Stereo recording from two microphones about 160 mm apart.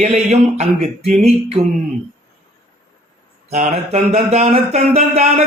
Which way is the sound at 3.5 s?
45° right (ahead or behind).